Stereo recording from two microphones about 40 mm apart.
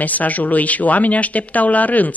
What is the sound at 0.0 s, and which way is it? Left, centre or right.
Speech, left.